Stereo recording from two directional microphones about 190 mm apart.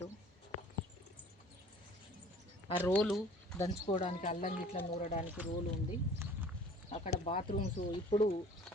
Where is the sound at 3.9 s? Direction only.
35° left (ahead or behind).